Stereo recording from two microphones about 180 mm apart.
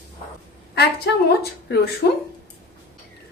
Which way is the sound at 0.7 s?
60° left (ahead or behind).